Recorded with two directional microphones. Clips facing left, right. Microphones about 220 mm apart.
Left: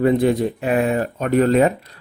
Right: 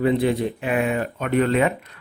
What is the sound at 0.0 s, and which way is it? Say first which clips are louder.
Speech: left 3 dB; 45° left (ahead or behind).